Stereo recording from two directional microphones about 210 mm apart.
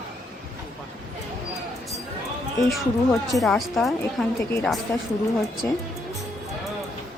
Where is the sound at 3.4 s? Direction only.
Centre (ahead or behind).